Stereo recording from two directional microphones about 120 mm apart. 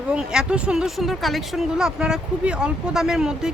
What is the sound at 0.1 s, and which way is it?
Speech, 5° right (ahead or behind).